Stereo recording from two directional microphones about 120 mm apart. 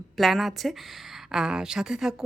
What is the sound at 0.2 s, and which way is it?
A woman's voice, centre (ahead or behind).